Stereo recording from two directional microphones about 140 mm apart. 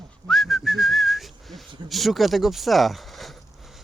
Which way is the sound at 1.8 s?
Centre (ahead or behind).